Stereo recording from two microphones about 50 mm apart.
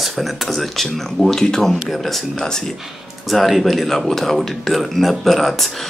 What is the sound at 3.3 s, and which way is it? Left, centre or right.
Speech, centre.